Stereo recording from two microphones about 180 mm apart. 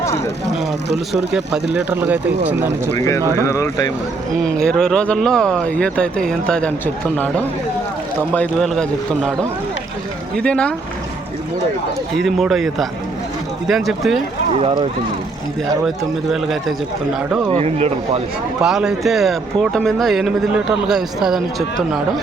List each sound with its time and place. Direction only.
1.1 s speech: 5° right (ahead or behind)
3.4 s speech: 15° left (ahead or behind)
4.4 s speech: 5° left (ahead or behind)
10.3 s speech: 5° left (ahead or behind)
12.2 s speech: centre (ahead or behind)
14.5 s speech: 30° right (ahead or behind)
16.3 s speech: centre (ahead or behind)
17.5 s speech: 35° right (ahead or behind)
18.6 s speech: 5° right (ahead or behind)